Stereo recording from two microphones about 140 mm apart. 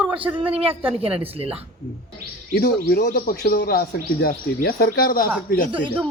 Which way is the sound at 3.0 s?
90° left.